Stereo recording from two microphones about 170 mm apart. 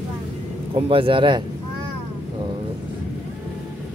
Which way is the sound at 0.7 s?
30° right (ahead or behind).